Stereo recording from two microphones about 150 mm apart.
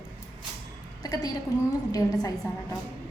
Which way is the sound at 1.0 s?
25° left (ahead or behind).